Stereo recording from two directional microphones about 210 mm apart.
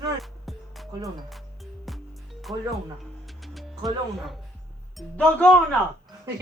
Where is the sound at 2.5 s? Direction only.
25° right (ahead or behind).